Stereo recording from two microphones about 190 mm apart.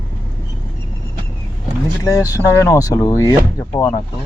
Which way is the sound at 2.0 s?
15° left (ahead or behind).